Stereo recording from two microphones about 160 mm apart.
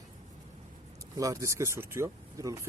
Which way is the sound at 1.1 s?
20° right (ahead or behind).